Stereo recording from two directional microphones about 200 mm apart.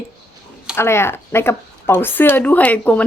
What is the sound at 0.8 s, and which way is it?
A woman's voice, 10° left (ahead or behind).